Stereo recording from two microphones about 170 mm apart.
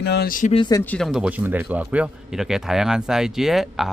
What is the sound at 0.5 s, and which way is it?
Speech, 25° left (ahead or behind).